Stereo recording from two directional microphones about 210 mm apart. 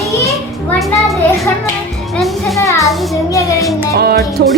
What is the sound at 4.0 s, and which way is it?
Speech, 50° right (ahead or behind).